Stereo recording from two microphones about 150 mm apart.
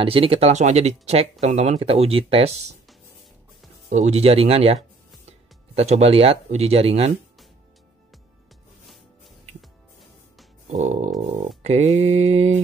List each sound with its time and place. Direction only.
0.0 s speech: 40° right (ahead or behind)
3.9 s speech: 50° right (ahead or behind)
5.8 s speech: 45° right (ahead or behind)
10.7 s speech: 50° right (ahead or behind)